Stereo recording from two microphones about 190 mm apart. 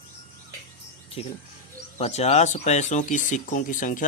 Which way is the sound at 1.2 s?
30° left (ahead or behind).